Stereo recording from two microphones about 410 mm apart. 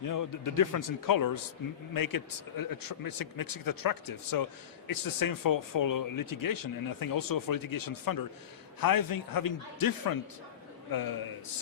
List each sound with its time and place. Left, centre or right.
0.0 s speech: left